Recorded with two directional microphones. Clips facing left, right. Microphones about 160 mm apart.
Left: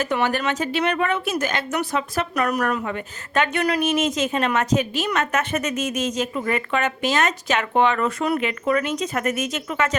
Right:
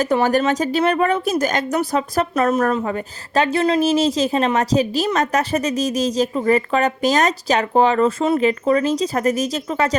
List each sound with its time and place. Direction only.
0.0 s speech: 35° right (ahead or behind)